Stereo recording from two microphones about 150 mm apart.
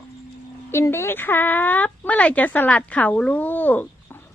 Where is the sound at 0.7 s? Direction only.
15° left (ahead or behind).